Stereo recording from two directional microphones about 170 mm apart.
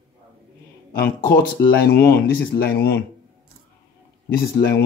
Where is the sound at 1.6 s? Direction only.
20° left (ahead or behind).